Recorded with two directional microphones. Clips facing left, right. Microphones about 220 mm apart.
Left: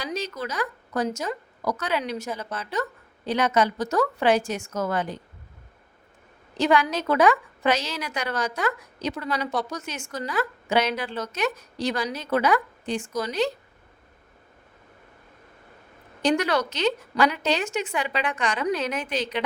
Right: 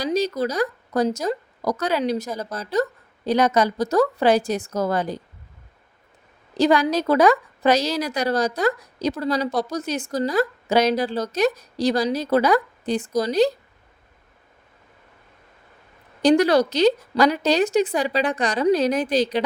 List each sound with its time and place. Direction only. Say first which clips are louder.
0.0 s a woman's voice: right 9 dB; 35° right (ahead or behind)
6.6 s a woman's voice: right 4 dB; 35° right (ahead or behind)
16.2 s a woman's voice: right 7 dB; 35° right (ahead or behind)